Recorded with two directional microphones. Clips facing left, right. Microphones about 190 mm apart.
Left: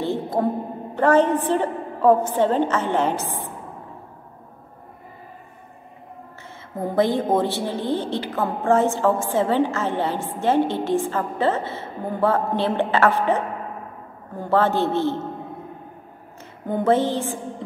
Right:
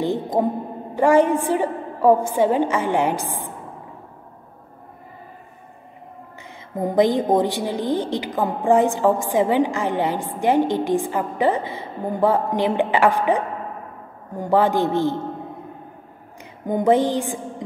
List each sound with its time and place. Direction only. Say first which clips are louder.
0.0 s a sound: right 2 dB; 15° right (ahead or behind)
0.9 s a woman's voice: right 2 dB; 10° right (ahead or behind)
6.8 s a woman's voice: right 3 dB; 15° right (ahead or behind)
16.6 s a woman's voice: right 2 dB; 15° right (ahead or behind)